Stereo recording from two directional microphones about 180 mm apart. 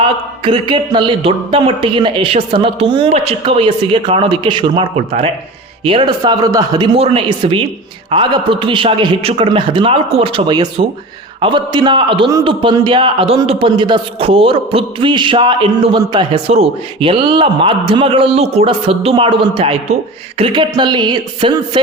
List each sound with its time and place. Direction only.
0.0 s a man's voice: 30° right (ahead or behind)